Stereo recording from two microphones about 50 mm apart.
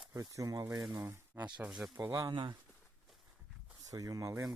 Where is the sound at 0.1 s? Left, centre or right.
Right.